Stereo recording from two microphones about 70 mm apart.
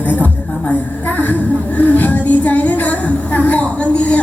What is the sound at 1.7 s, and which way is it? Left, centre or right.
Speech, left.